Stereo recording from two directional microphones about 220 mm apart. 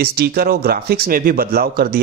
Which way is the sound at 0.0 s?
45° right (ahead or behind).